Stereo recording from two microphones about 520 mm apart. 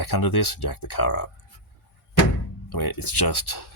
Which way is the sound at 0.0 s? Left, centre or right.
Left.